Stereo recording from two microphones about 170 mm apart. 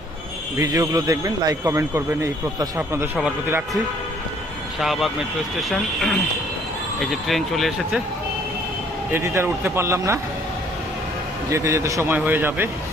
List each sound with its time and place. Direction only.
0.6 s speech: 20° right (ahead or behind)
4.8 s speech: centre (ahead or behind)
9.1 s speech: 15° right (ahead or behind)
11.5 s speech: 15° right (ahead or behind)